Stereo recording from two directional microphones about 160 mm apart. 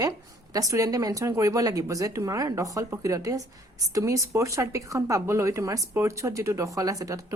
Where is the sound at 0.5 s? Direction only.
20° right (ahead or behind).